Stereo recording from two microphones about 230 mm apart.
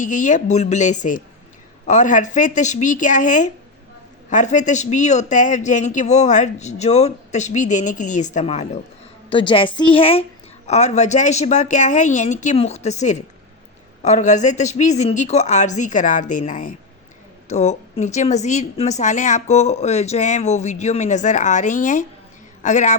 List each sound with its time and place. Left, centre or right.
0.0 s a man's voice: left